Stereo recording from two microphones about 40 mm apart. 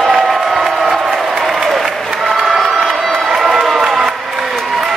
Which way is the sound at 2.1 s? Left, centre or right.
Centre.